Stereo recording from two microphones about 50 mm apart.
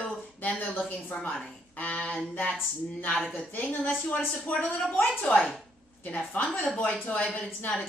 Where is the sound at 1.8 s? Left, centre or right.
Left.